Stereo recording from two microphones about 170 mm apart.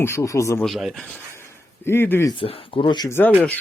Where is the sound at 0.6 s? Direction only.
Centre (ahead or behind).